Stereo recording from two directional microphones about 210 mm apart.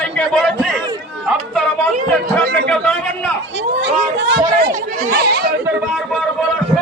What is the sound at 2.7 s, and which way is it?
Speech, 5° left (ahead or behind).